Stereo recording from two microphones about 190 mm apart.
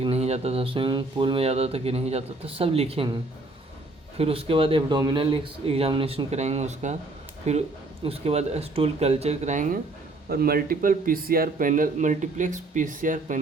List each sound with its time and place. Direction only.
0.0 s speech: 30° right (ahead or behind)
4.2 s a man's voice: 30° right (ahead or behind)
10.2 s speech: 55° right (ahead or behind)